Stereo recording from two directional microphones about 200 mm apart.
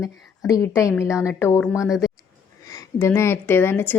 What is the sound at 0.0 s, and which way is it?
Speech, 15° left (ahead or behind).